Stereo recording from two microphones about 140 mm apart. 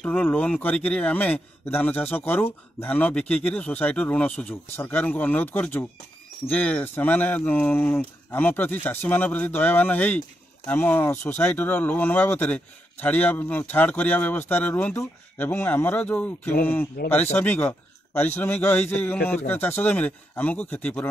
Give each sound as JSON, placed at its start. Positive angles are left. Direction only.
{"t": 0.0, "sound": "a man's voice", "side_deg": 15}